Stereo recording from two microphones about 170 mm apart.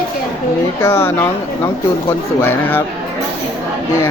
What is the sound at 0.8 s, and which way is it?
Speech, 15° left (ahead or behind).